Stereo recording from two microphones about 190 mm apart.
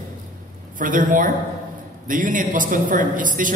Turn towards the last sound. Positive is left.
turn(degrees=-45)  # may be behind; listen again after turning